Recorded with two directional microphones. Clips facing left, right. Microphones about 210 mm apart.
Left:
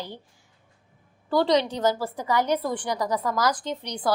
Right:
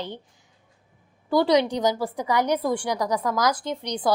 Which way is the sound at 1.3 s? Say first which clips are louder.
Right 2 dB; 10° right (ahead or behind).